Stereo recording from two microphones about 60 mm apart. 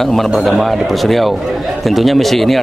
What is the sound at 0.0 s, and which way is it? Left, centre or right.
Speech, centre.